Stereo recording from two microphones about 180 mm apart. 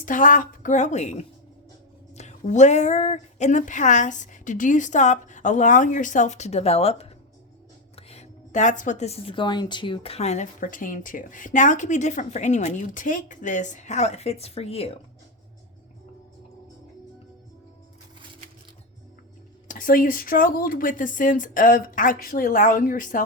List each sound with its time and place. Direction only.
0.0 s a woman's voice: 45° left (ahead or behind)
19.6 s speech: 50° left (ahead or behind)